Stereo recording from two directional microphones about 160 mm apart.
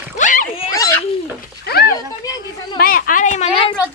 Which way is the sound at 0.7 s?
20° left (ahead or behind).